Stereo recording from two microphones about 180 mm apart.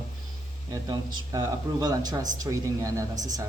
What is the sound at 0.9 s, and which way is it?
Speech, 20° right (ahead or behind).